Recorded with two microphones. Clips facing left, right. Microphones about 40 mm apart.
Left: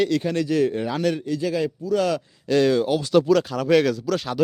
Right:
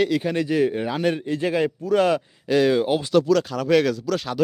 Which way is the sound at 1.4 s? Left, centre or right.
Right.